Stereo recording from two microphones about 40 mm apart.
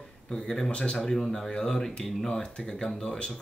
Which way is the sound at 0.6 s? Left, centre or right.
Left.